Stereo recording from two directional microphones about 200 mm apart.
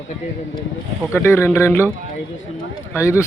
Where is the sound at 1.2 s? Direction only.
10° left (ahead or behind).